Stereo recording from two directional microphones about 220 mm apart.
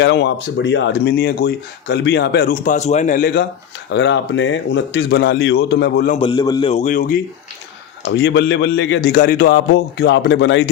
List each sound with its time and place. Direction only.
0.0 s speech: 55° left (ahead or behind)
3.9 s speech: 55° left (ahead or behind)
6.1 s a man's voice: 20° left (ahead or behind); by 7.2 s 40° left (ahead or behind)
8.0 s speech: 55° left (ahead or behind)